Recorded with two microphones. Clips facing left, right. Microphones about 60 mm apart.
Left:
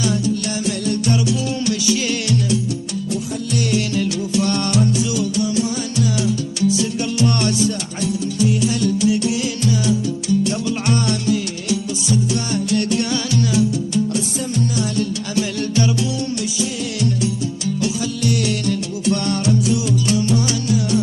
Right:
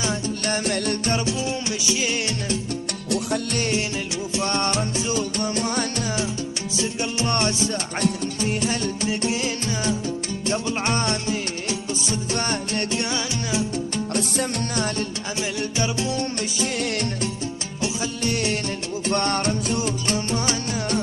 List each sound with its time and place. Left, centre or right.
0.0 s music: right
0.7 s music: right
4.3 s music: right
6.2 s music: right
8.0 s music: right
15.3 s music: right
17.8 s music: right